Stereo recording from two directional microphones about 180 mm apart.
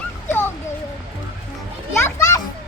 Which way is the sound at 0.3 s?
10° left (ahead or behind).